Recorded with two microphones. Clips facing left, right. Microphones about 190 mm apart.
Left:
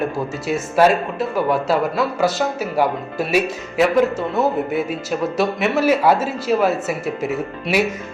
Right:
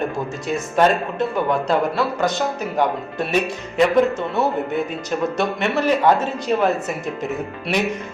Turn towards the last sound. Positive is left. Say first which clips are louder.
# left 3 dB
turn(degrees=5)  # may be behind; listen again after turning